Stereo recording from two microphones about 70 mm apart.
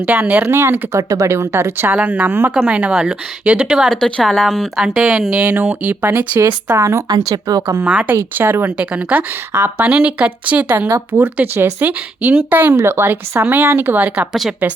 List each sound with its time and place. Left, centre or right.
0.0 s a woman's voice: centre
0.4 s speech: right
2.0 s a woman's voice: right
4.0 s speech: centre
4.8 s a woman's voice: centre
5.4 s speech: right
7.1 s speech: right
7.9 s a woman's voice: centre
8.1 s speech: right
8.9 s speech: centre
9.5 s speech: right
9.8 s speech: right